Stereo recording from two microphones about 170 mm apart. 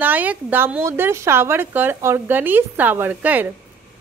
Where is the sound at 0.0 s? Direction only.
10° right (ahead or behind).